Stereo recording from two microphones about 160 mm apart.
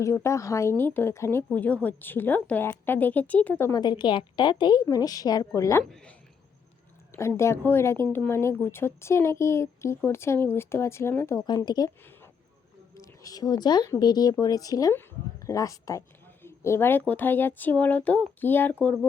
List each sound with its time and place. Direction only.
0.0 s a woman's voice: 15° left (ahead or behind)
3.7 s a woman's voice: 25° left (ahead or behind)
5.8 s speech: 5° left (ahead or behind)
7.1 s a woman's voice: 15° left (ahead or behind)
11.4 s a woman's voice: 25° left (ahead or behind); by 18.9 s 10° left (ahead or behind)